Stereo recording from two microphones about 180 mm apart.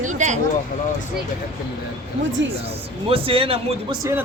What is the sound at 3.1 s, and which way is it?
Speech, 30° right (ahead or behind).